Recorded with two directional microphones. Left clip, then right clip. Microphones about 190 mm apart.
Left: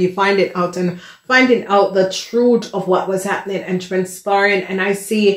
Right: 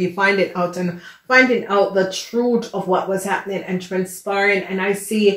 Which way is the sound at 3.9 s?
50° left (ahead or behind).